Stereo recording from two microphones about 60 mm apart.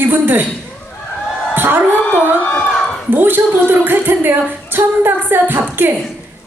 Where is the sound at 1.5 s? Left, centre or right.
Right.